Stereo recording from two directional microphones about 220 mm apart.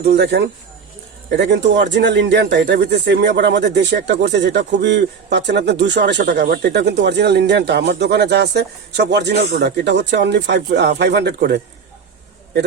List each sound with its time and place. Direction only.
0.0 s speech: 50° right (ahead or behind)